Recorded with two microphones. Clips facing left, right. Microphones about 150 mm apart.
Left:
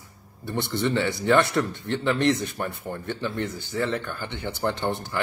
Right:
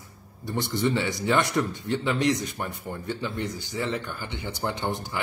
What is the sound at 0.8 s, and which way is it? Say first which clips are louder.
Speech: left 1 dB; 10° right (ahead or behind).